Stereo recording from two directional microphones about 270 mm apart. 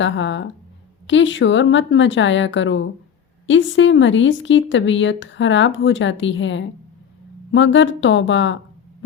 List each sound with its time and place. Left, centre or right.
0.0 s speech: left